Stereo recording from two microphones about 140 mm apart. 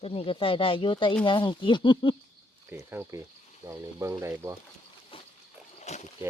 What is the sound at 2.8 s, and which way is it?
Speech, 20° right (ahead or behind).